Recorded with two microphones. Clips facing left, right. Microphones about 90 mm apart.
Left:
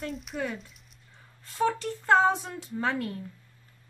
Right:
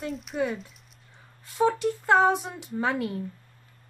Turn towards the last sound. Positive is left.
turn(degrees=-15)  # may be behind; listen again after turning